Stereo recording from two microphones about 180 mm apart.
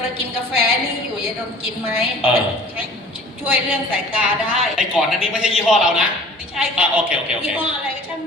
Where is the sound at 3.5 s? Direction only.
5° right (ahead or behind).